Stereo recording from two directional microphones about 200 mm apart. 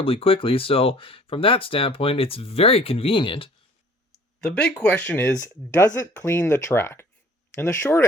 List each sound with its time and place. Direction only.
0.0 s speech: 25° left (ahead or behind)
4.4 s speech: 5° left (ahead or behind)